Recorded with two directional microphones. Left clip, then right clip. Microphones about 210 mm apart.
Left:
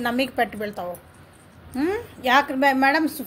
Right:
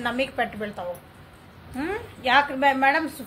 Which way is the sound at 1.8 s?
50° left (ahead or behind).